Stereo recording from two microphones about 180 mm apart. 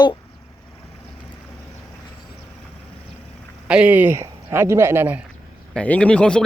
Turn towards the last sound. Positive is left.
turn(degrees=5)  # may be behind; listen again after turning